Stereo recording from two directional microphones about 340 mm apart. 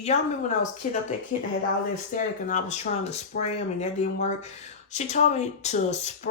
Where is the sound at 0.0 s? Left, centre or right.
Centre.